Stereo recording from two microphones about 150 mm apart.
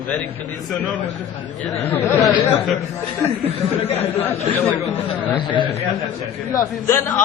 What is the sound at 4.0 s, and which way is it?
Speech, 15° left (ahead or behind).